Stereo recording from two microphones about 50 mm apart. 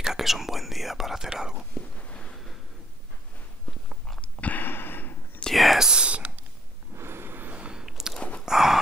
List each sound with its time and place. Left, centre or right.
0.0 s speech: centre
1.8 s a sound: left
4.2 s whispering: left
5.5 s whispering: centre
5.9 s a sound: right
7.0 s vehicle: right
7.5 s a sound: right
7.8 s biting: centre
8.5 s horse: centre